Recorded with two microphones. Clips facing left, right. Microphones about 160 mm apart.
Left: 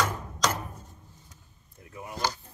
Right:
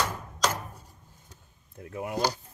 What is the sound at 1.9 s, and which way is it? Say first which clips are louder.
Speech: right 7 dB; 65° right (ahead or behind).